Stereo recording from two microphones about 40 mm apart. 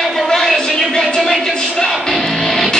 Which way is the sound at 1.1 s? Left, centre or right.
Centre.